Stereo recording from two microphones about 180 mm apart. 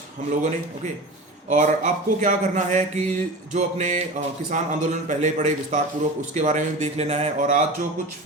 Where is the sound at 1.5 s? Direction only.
40° right (ahead or behind).